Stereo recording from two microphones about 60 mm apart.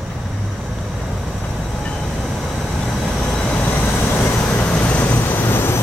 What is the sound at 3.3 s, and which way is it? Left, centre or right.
Vehicle, centre.